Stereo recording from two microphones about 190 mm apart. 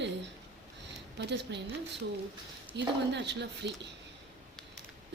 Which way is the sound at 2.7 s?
65° right (ahead or behind).